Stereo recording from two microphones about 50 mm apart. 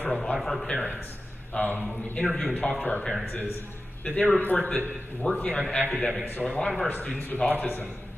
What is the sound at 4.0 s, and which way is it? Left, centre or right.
Speech, left.